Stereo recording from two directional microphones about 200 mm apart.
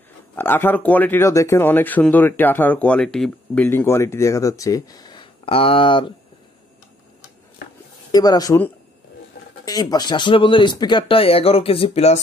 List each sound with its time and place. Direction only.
0.4 s speech: 10° left (ahead or behind)
8.1 s speech: 20° left (ahead or behind)